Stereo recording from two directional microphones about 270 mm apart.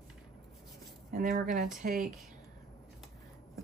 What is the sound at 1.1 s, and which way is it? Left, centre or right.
Speech, right.